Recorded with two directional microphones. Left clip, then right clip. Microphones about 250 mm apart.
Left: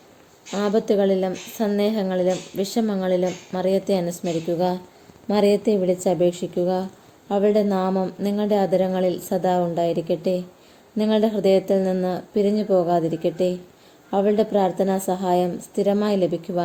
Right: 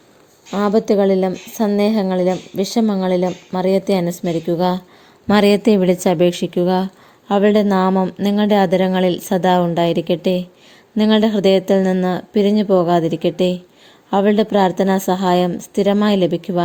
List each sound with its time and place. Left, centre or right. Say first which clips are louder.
0.5 s speech: right 5 dB; right